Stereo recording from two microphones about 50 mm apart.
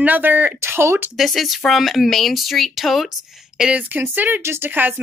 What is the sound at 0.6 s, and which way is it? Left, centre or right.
Speech, right.